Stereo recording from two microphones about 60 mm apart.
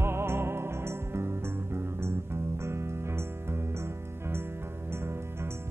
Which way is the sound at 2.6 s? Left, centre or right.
Right.